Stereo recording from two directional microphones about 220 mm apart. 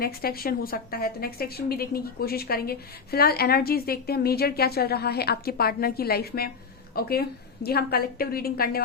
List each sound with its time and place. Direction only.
0.0 s a woman's voice: 45° left (ahead or behind)